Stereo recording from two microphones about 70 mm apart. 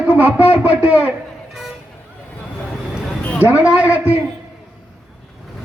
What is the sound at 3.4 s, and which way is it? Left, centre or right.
Speech, right.